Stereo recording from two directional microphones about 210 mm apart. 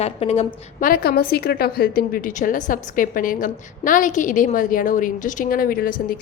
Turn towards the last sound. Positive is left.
turn(degrees=45)  # may be behind; listen again after turning